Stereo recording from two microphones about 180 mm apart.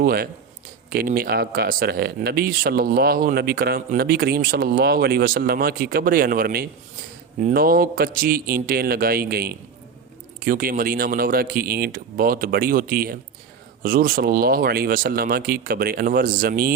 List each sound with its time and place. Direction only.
0.0 s a man's voice: 55° right (ahead or behind)